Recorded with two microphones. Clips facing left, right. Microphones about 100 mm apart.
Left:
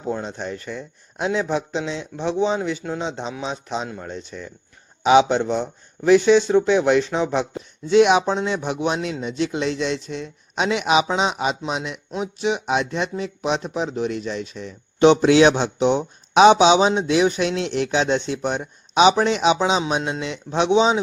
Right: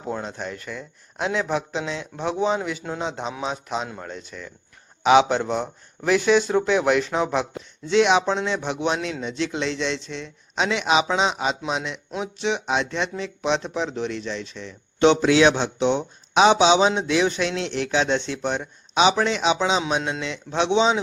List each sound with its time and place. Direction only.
0.1 s a man's voice: centre (ahead or behind)
8.0 s speech: 10° left (ahead or behind)
9.0 s speech: 40° left (ahead or behind)
9.2 s speech: 10° left (ahead or behind)
9.6 s speech: 45° left (ahead or behind)
10.8 s speech: 10° left (ahead or behind)
14.1 s speech: 50° left (ahead or behind)
15.0 s speech: 15° left (ahead or behind)